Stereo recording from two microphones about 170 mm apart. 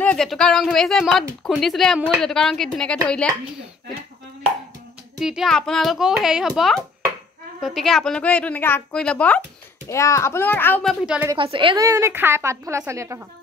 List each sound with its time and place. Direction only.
0.0 s speech: 5° left (ahead or behind)
5.2 s a woman's voice: centre (ahead or behind)
9.8 s a woman's voice: 15° left (ahead or behind); by 11.2 s 5° right (ahead or behind)
11.3 s a woman's voice: 30° right (ahead or behind)